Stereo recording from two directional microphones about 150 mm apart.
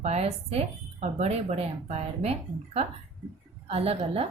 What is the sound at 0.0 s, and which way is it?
A woman's voice, 45° right (ahead or behind).